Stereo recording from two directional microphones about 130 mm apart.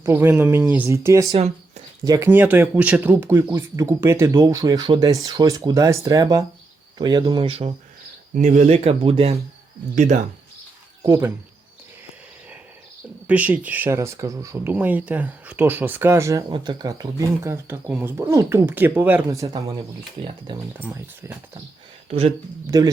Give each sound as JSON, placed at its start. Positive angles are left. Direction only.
{"t": 0.0, "sound": "speech", "side_deg": -20}
{"t": 1.3, "sound": "speech", "side_deg": -55}
{"t": 2.0, "sound": "speech", "side_deg": -25}
{"t": 2.3, "sound": "speech", "side_deg": -15}
{"t": 8.4, "sound": "speech", "side_deg": -70}
{"t": 9.9, "sound": "speech", "side_deg": -70}
{"t": 11.0, "sound": "speech", "side_deg": -20}
{"t": 13.2, "sound": "speech", "side_deg": -10}
{"t": 16.5, "sound": "speech", "side_deg": -35}
{"t": 20.7, "sound": "speech", "side_deg": -15}
{"t": 22.7, "sound": "speech", "side_deg": -30}